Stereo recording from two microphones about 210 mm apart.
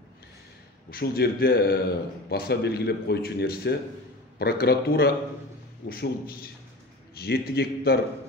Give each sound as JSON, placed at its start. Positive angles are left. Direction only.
{"t": 0.8, "sound": "speech", "side_deg": 50}